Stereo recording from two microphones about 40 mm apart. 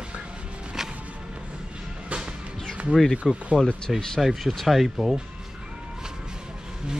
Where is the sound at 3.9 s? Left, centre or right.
Centre.